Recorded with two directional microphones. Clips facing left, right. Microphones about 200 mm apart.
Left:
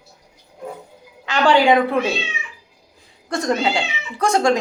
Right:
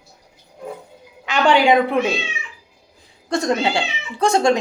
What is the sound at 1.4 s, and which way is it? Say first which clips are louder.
Speech: even; 20° right (ahead or behind).